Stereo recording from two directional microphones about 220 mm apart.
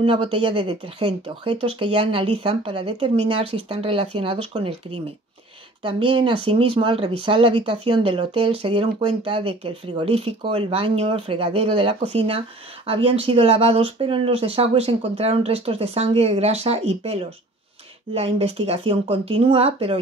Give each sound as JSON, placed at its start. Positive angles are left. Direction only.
{"t": 0.0, "sound": "speech", "side_deg": -25}
{"t": 5.9, "sound": "speech", "side_deg": -25}